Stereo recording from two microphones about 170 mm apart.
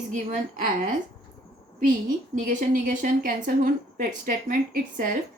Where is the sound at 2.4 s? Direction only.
55° right (ahead or behind).